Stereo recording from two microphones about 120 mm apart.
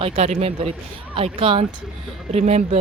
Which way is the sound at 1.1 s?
50° right (ahead or behind).